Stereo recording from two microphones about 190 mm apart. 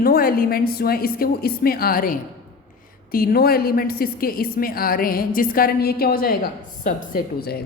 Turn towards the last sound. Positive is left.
turn(degrees=55)  # may be behind; listen again after turning